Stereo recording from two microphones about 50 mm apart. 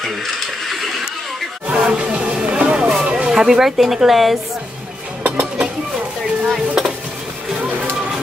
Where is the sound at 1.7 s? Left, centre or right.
Centre.